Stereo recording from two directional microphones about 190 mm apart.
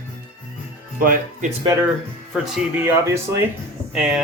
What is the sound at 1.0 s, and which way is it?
Speech, 45° right (ahead or behind).